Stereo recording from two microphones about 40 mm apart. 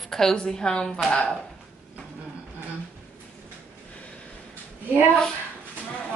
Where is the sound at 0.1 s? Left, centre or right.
Centre.